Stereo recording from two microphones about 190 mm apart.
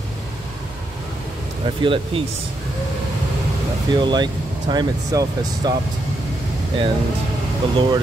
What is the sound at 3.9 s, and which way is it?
Speech, 25° right (ahead or behind).